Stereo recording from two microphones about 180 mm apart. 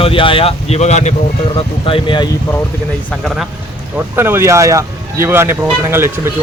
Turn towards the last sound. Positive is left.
turn(degrees=-15)  # may be behind; listen again after turning